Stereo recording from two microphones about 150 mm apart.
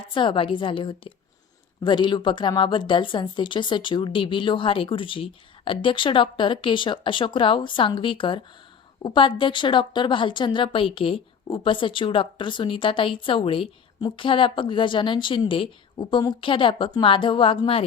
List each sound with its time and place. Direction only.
0.1 s a woman's voice: 30° left (ahead or behind)